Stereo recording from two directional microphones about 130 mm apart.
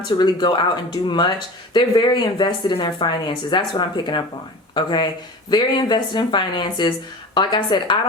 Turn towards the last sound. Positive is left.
turn(degrees=35)  # may be behind; listen again after turning